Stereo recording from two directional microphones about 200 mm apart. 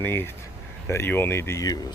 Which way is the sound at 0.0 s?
10° left (ahead or behind).